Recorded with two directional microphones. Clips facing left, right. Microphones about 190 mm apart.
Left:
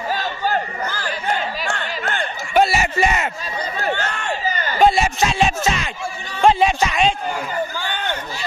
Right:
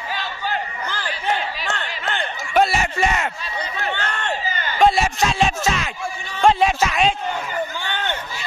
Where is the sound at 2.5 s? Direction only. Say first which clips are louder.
Left 1 dB; 5° left (ahead or behind).